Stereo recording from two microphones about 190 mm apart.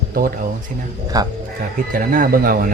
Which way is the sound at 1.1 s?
20° right (ahead or behind).